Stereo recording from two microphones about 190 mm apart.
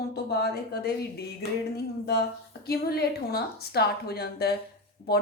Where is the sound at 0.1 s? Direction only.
55° left (ahead or behind).